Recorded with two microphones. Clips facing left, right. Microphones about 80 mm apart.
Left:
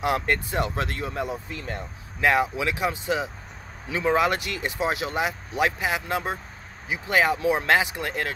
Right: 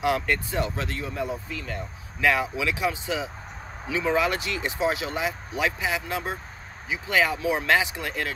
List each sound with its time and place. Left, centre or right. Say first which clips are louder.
0.3 s speech: left 1 dB; left
1.5 s speech: even; left